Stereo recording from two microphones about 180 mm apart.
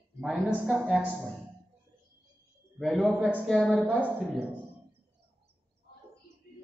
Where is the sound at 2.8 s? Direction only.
5° left (ahead or behind).